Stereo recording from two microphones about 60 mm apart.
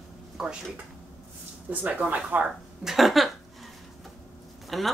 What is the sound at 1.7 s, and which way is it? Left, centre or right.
Speech, right.